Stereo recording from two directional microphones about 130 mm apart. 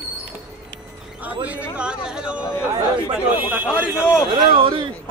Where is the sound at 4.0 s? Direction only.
15° left (ahead or behind).